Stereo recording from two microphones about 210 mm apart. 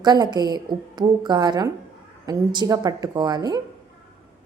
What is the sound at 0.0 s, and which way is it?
A woman's voice, 20° right (ahead or behind).